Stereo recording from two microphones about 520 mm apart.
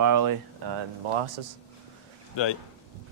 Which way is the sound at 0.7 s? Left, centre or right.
Right.